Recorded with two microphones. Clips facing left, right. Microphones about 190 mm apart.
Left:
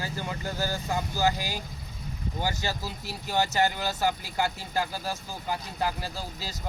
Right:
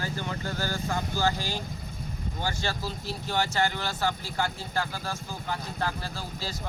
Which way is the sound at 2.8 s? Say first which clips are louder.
Right 2 dB; 10° left (ahead or behind).